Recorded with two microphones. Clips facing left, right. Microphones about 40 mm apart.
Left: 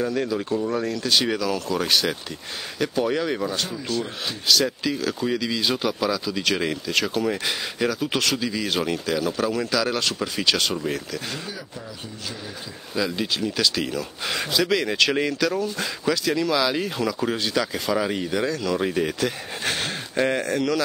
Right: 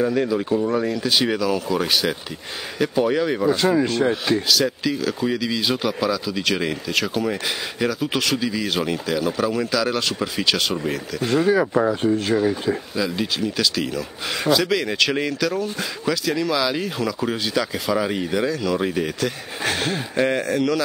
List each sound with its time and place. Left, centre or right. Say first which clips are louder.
0.0 s speech: right 4 dB; centre
3.4 s speech: right 9 dB; right
3.8 s speech: right 7 dB; right
4.5 s speech: right 1 dB; centre
11.5 s speech: right 19 dB; right
11.9 s speech: right 16 dB; right
12.9 s speech: right 2 dB; centre